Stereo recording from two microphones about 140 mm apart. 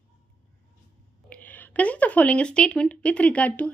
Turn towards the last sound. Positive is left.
turn(degrees=10)  # may be behind; listen again after turning